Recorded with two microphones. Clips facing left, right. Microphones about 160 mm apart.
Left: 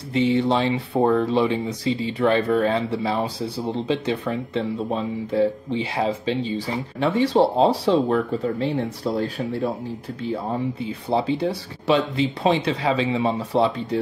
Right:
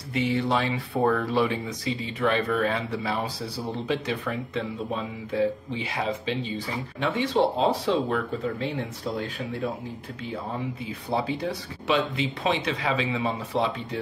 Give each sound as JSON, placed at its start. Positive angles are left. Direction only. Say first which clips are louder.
{"t": 0.1, "sound": "speech", "louder": "left 5 dB", "side_deg": 25}
{"t": 11.1, "sound": "speech", "louder": "left 5 dB", "side_deg": 30}